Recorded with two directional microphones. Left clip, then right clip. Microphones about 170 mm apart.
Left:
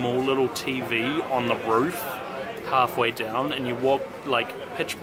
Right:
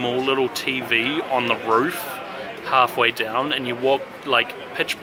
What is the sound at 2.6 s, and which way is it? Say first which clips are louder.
Speech: right 5 dB; 10° right (ahead or behind).